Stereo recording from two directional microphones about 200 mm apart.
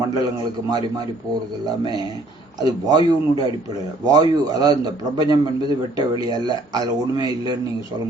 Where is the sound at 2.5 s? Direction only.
20° right (ahead or behind).